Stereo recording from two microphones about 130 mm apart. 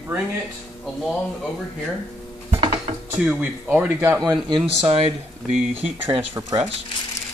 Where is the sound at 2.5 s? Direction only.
45° right (ahead or behind).